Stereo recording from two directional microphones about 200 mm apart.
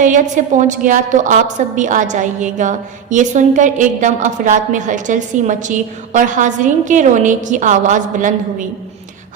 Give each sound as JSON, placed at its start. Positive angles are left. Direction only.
{"t": 0.0, "sound": "a woman's voice", "side_deg": -40}